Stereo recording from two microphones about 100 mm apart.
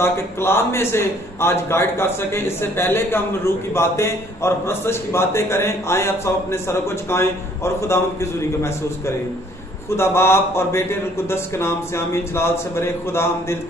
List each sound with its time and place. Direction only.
0.0 s a man's voice: 25° left (ahead or behind)